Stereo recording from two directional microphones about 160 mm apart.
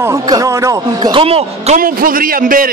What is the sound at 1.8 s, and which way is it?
Speech, 65° right (ahead or behind).